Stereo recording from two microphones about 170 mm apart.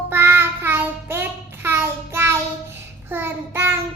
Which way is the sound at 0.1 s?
15° right (ahead or behind).